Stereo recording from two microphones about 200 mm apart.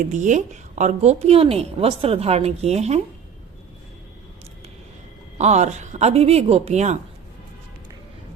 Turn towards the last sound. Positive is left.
turn(degrees=-35)  # may be behind; listen again after turning